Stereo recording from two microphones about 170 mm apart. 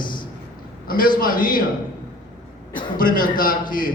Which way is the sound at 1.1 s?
55° left (ahead or behind).